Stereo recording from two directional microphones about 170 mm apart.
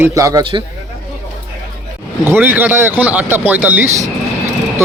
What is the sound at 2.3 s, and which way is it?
Speech, 10° right (ahead or behind).